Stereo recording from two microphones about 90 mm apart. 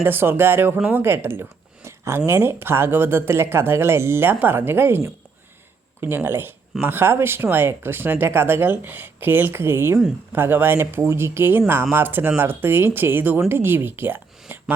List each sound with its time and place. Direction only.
0.0 s speech: 25° right (ahead or behind)
0.8 s speech: 10° right (ahead or behind)
1.0 s speech: 25° right (ahead or behind)
14.5 s a sound: 25° right (ahead or behind)